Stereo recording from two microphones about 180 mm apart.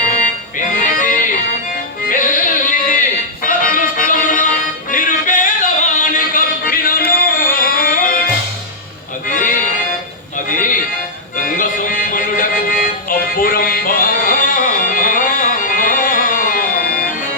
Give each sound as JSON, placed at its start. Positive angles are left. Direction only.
{"t": 0.8, "sound": "music", "side_deg": 45}
{"t": 9.2, "sound": "music", "side_deg": 50}
{"t": 10.5, "sound": "music", "side_deg": 50}